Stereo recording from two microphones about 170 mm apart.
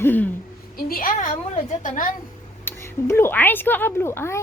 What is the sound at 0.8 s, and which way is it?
A woman's voice, 60° left (ahead or behind).